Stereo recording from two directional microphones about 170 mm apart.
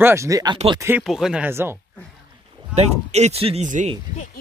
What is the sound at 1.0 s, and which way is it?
Speech, centre (ahead or behind).